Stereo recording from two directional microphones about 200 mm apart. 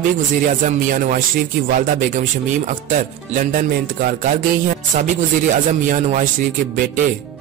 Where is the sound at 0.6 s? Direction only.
40° right (ahead or behind).